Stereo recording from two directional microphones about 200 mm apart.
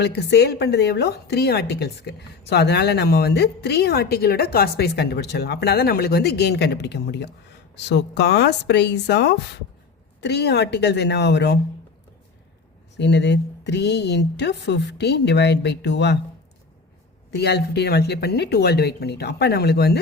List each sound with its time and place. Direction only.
0.0 s a woman's voice: 55° left (ahead or behind)
13.0 s a woman's voice: 60° left (ahead or behind)
17.3 s a woman's voice: 55° left (ahead or behind)